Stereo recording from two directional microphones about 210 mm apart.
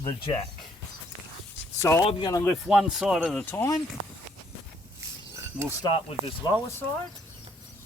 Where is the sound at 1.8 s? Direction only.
15° left (ahead or behind).